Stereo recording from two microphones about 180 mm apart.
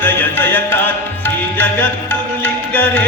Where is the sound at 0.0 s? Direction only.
10° left (ahead or behind).